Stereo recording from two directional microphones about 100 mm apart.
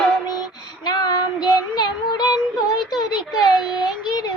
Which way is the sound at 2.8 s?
45° left (ahead or behind).